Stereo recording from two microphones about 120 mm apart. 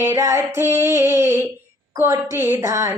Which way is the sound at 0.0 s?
25° right (ahead or behind).